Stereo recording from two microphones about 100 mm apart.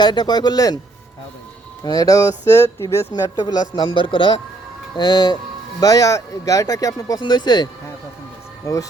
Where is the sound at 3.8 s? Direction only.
55° left (ahead or behind).